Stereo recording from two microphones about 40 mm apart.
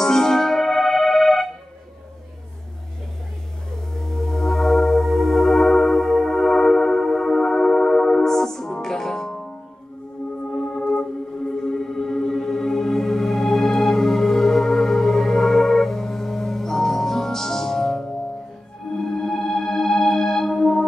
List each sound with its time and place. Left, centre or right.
0.0 s music: centre
3.9 s music: centre
10.5 s music: centre